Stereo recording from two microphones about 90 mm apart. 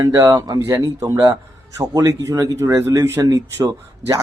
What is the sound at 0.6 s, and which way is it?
A man's voice, 30° right (ahead or behind).